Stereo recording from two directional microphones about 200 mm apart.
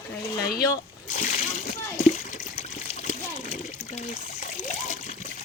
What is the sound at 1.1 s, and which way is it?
Splash, 40° left (ahead or behind).